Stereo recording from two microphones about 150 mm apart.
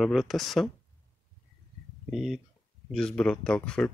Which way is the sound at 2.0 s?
Centre (ahead or behind).